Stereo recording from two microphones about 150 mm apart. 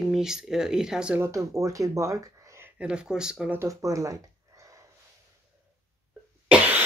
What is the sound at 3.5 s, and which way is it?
Speech, 20° right (ahead or behind).